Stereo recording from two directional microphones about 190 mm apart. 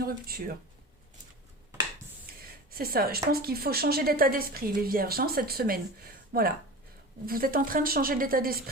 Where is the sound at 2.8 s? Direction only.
50° right (ahead or behind).